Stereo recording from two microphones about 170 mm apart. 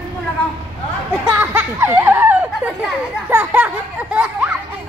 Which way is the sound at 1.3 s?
10° right (ahead or behind).